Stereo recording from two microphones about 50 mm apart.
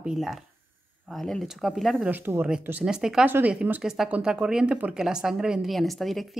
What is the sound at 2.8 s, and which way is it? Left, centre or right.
Speech, centre.